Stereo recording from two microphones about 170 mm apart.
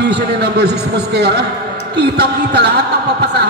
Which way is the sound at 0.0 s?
80° right.